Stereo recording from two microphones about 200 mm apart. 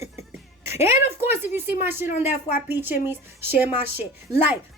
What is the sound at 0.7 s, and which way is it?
Speech, 30° left (ahead or behind).